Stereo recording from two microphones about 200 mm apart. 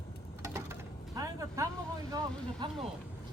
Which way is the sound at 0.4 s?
15° right (ahead or behind).